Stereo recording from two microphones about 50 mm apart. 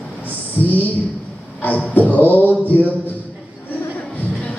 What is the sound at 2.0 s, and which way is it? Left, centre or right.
Speech, left.